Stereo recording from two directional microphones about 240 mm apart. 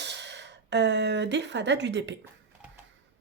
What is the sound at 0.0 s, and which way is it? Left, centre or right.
Speech, right.